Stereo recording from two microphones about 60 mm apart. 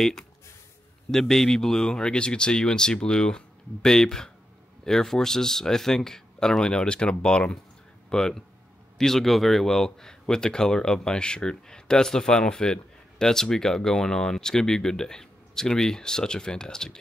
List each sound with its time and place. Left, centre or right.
1.1 s a man's voice: centre